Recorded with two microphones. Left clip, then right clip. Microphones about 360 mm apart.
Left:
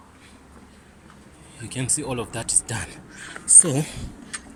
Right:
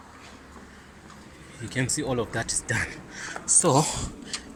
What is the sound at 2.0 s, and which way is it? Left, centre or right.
Speech, centre.